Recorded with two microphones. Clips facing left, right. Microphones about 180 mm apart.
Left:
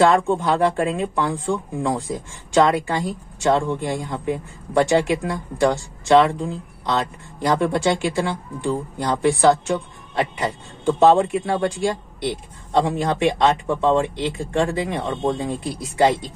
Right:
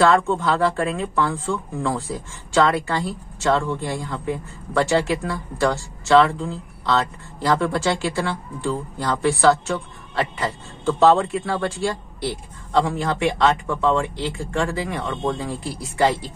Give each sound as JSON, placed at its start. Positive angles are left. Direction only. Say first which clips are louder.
{"t": 0.4, "sound": "speech", "louder": "left 1 dB", "side_deg": 15}